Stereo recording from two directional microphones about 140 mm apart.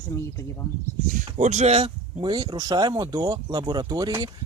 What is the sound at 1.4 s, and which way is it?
Speech, 55° right (ahead or behind).